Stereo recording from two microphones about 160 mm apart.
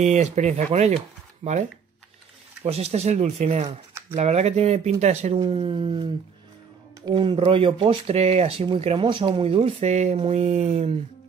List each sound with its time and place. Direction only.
0.0 s speech: 45° right (ahead or behind)
5.5 s speech: 35° right (ahead or behind)
7.1 s speech: 30° right (ahead or behind)